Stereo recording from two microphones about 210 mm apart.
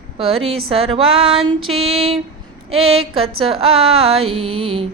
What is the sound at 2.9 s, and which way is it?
Speech, 80° right.